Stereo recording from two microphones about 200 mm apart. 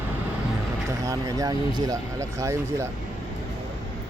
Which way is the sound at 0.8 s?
15° right (ahead or behind).